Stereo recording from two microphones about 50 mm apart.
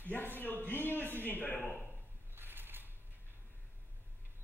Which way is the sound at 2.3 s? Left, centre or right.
Right.